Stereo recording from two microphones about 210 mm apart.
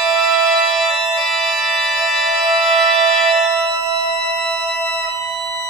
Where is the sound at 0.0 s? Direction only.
Centre (ahead or behind).